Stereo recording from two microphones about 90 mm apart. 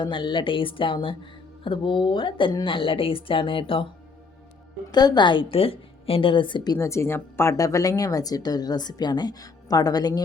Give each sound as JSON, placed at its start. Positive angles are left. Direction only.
{"t": 0.0, "sound": "a woman's voice", "side_deg": 65}
{"t": 4.9, "sound": "a woman's voice", "side_deg": 50}
{"t": 6.7, "sound": "speech", "side_deg": 30}
{"t": 7.5, "sound": "a woman's voice", "side_deg": 40}